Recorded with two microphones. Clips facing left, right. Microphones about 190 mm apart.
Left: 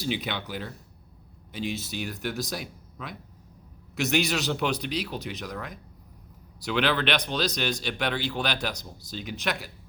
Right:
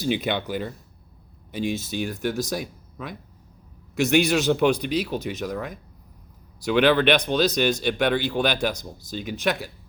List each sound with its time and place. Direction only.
0.0 s speech: 50° right (ahead or behind)